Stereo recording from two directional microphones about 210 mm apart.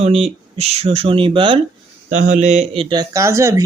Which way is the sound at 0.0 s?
30° right (ahead or behind).